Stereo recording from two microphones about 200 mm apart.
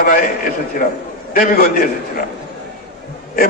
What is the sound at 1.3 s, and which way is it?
Speech, 45° left (ahead or behind).